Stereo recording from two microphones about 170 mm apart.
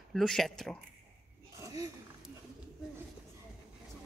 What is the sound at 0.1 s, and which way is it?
Speech, centre (ahead or behind).